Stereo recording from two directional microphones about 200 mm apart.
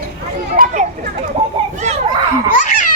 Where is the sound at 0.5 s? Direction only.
45° right (ahead or behind).